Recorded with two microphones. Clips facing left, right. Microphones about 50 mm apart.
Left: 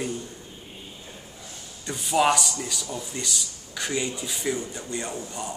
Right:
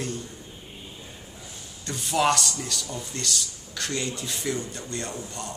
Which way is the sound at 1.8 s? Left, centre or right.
Centre.